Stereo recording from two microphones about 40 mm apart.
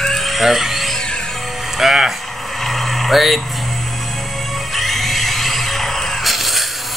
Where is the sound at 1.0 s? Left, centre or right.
Centre.